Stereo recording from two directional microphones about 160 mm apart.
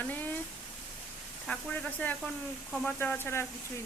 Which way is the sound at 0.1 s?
10° left (ahead or behind).